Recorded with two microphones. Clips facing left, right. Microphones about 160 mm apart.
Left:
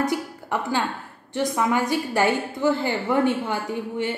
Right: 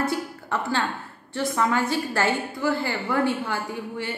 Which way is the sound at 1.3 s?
15° left (ahead or behind).